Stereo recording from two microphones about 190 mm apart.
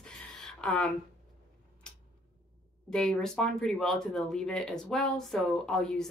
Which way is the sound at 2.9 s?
5° left (ahead or behind).